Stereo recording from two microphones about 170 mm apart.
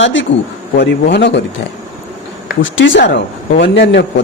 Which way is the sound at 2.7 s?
90° left.